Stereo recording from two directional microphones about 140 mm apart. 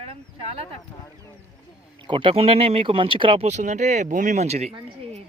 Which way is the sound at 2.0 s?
35° right (ahead or behind).